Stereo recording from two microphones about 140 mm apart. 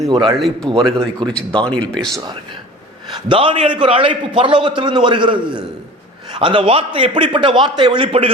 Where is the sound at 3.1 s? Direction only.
35° right (ahead or behind).